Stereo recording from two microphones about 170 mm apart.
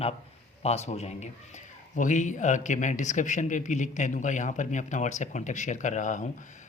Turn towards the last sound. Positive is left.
turn(degrees=45)  # may be behind; listen again after turning